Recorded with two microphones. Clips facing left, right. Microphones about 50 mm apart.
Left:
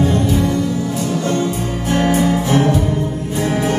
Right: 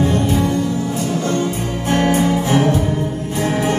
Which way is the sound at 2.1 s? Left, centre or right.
Right.